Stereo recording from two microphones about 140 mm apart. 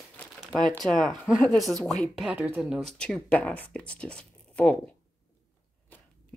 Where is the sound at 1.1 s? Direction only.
65° left (ahead or behind).